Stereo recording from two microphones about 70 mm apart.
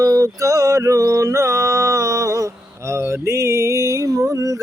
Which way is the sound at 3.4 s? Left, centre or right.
Right.